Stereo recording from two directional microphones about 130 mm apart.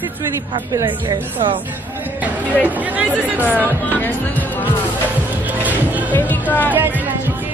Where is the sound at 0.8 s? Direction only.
40° right (ahead or behind).